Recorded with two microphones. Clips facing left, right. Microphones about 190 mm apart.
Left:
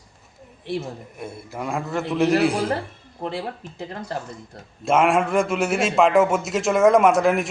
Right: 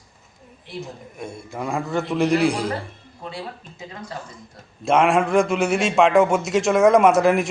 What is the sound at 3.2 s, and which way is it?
Speech, 65° left (ahead or behind).